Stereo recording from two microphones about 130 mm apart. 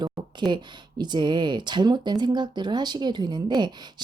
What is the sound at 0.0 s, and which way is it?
Speech, 35° right (ahead or behind).